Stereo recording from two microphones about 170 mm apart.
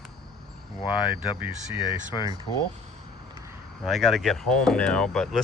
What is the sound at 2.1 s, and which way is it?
Speech, 30° left (ahead or behind).